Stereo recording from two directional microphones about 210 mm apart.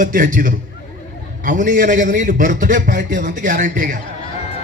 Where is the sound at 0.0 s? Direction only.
40° right (ahead or behind).